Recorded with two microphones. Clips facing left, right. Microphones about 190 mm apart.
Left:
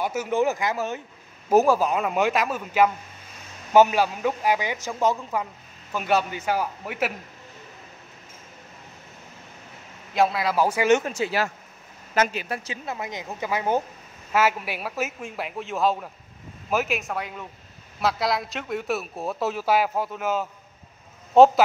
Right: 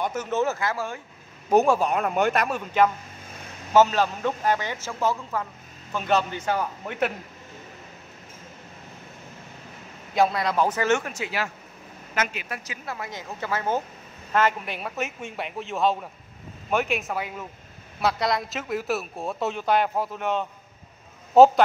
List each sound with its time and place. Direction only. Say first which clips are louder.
0.0 s a man's voice: left 2 dB; 10° left (ahead or behind)
1.5 s a man's voice: left 1 dB; centre (ahead or behind)
10.1 s a man's voice: even; centre (ahead or behind)